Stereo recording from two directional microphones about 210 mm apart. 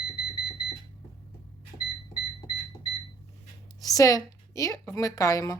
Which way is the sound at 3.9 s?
15° left (ahead or behind).